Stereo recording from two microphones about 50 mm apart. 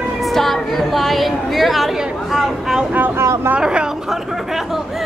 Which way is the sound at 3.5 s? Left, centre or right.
Centre.